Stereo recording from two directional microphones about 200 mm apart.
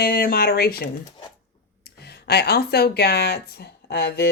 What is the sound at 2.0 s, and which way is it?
Speech, 55° left (ahead or behind).